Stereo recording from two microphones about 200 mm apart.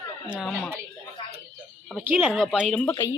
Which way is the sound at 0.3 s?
Centre (ahead or behind).